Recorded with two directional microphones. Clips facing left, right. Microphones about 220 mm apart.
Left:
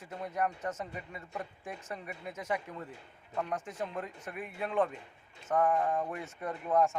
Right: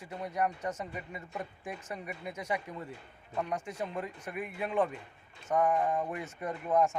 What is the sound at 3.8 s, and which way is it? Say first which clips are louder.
A man's voice: right 1 dB; 10° right (ahead or behind).